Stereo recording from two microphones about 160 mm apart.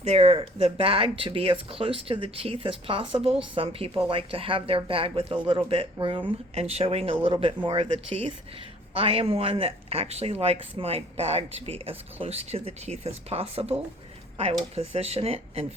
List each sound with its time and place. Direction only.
0.0 s speech: 40° right (ahead or behind)